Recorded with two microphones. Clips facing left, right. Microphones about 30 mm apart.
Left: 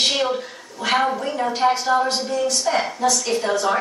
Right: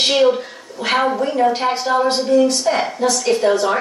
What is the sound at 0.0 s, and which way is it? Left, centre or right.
A woman's voice, centre.